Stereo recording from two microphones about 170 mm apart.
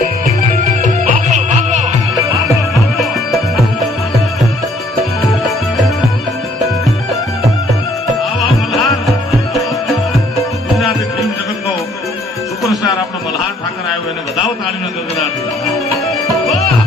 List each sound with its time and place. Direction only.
0.6 s music: 50° right (ahead or behind)
2.7 s music: centre (ahead or behind)
8.7 s music: centre (ahead or behind)